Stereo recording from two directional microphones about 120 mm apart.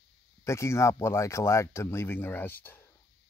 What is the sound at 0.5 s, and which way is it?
Speech, 25° left (ahead or behind).